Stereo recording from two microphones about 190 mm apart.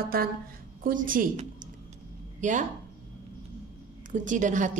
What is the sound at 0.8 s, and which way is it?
A woman's voice, 45° right (ahead or behind).